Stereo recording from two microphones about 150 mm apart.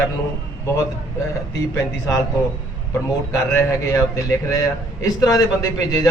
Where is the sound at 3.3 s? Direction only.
20° left (ahead or behind).